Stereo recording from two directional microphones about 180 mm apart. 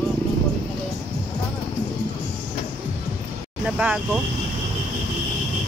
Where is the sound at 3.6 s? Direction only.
5° right (ahead or behind).